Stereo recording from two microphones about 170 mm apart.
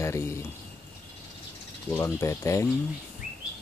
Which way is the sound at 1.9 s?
15° left (ahead or behind).